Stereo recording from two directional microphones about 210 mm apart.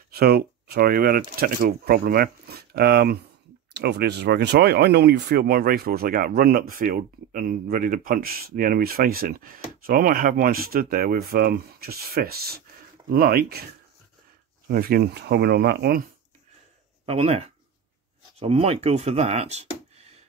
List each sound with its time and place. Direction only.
0.1 s speech: 45° right (ahead or behind)
14.7 s speech: 45° right (ahead or behind)
17.0 s speech: 25° right (ahead or behind)